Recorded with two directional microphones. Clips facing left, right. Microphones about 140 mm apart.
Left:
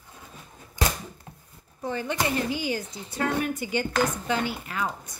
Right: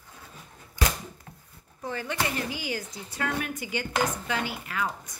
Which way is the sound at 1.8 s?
25° left (ahead or behind).